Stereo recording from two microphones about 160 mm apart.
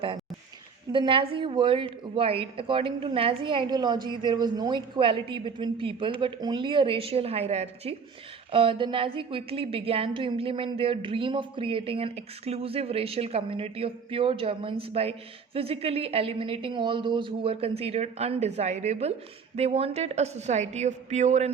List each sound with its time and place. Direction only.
0.9 s a woman's voice: 30° right (ahead or behind)